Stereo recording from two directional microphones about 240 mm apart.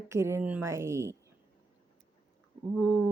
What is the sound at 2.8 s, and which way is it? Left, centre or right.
Speech, centre.